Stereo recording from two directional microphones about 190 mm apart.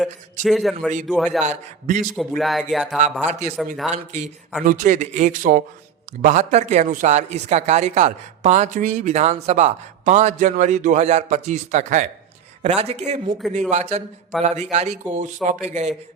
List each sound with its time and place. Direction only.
0.0 s speech: centre (ahead or behind)
1.5 s speech: 45° right (ahead or behind)
2.1 s speech: centre (ahead or behind)
3.9 s speech: 40° right (ahead or behind)